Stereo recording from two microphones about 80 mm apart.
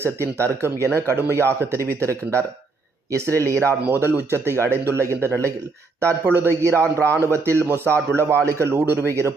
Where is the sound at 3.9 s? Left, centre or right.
Right.